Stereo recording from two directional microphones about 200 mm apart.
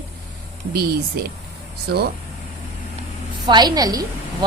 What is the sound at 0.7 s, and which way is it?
Speech, 50° right (ahead or behind).